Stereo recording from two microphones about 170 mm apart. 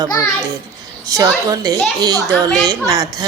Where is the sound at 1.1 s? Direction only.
20° right (ahead or behind).